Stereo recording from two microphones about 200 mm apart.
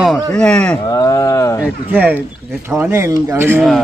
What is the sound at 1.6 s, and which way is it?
A man's voice, 10° right (ahead or behind).